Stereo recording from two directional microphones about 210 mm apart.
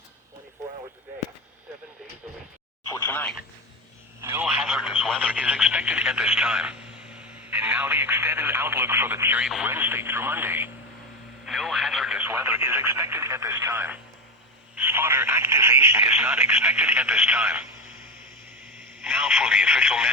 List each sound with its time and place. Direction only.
2.9 s speech: 10° left (ahead or behind)
4.2 s speech: 10° right (ahead or behind)
19.0 s speech: centre (ahead or behind)